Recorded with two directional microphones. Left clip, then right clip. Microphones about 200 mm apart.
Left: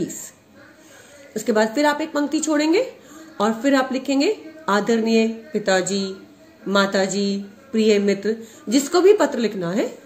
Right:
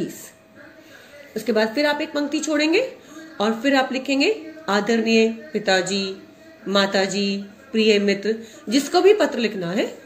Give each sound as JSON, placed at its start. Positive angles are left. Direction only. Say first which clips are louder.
{"t": 1.3, "sound": "a woman's voice", "louder": "left 1 dB", "side_deg": 45}